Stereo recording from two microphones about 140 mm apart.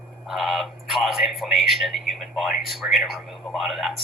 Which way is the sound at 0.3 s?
Centre (ahead or behind).